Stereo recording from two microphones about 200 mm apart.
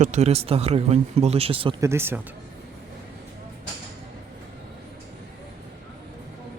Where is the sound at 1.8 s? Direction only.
10° right (ahead or behind).